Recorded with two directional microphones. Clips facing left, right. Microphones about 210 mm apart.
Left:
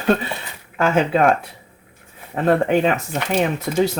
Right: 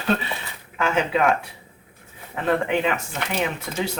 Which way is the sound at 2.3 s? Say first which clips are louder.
Left 5 dB; 40° left (ahead or behind).